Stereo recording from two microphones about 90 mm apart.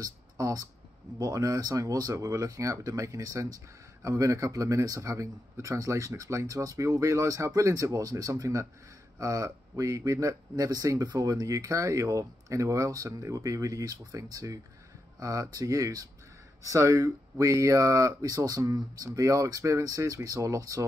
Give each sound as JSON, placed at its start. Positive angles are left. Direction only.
{"t": 0.0, "sound": "speech", "side_deg": -40}